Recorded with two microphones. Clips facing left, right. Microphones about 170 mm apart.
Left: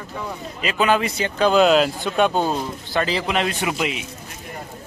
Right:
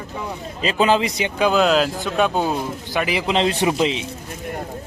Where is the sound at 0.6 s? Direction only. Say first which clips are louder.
Right 2 dB; 30° right (ahead or behind).